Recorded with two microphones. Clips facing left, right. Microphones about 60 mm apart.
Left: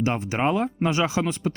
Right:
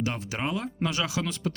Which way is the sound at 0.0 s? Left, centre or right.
Left.